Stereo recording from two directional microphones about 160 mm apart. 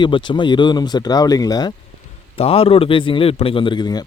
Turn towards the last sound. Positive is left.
turn(degrees=25)  # may be behind; listen again after turning